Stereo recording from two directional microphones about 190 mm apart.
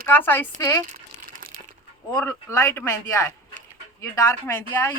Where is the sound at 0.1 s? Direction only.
10° left (ahead or behind).